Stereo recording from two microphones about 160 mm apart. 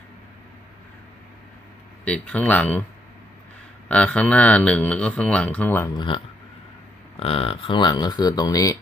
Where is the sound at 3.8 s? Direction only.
5° left (ahead or behind).